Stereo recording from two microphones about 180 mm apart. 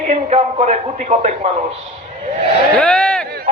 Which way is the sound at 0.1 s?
40° right (ahead or behind).